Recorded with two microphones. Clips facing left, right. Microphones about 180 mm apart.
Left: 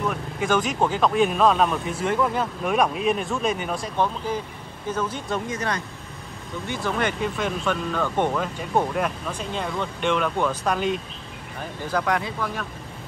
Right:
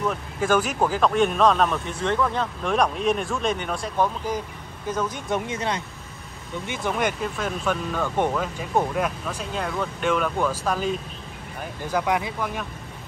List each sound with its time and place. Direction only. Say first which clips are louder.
0.5 s speech: right 1 dB; 5° right (ahead or behind)
4.9 s speech: right 1 dB; 15° right (ahead or behind)
6.8 s speech: even; 10° right (ahead or behind)
11.9 s speech: right 1 dB; 5° right (ahead or behind)